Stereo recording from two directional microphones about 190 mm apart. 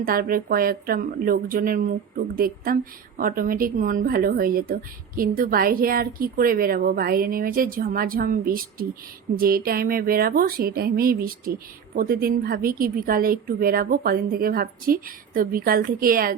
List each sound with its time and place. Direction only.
0.0 s a woman's voice: 50° right (ahead or behind)